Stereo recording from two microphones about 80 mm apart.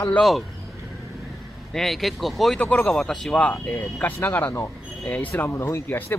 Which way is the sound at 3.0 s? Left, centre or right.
Centre.